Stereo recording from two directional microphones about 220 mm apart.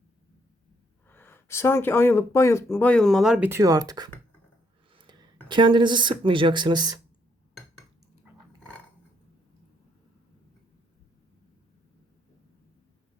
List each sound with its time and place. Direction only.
1.0 s speech: 10° left (ahead or behind); by 6.9 s 20° right (ahead or behind)